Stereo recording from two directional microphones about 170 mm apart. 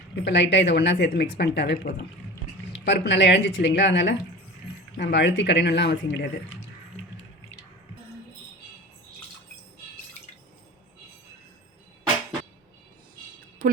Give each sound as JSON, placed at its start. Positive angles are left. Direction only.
{"t": 0.3, "sound": "speech", "side_deg": 90}
{"t": 2.7, "sound": "a woman's voice", "side_deg": 90}
{"t": 13.6, "sound": "speech", "side_deg": -55}